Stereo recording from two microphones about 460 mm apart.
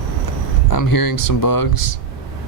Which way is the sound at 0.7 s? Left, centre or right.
Left.